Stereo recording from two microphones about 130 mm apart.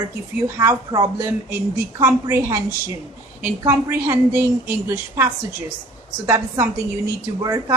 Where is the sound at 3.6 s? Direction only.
20° right (ahead or behind).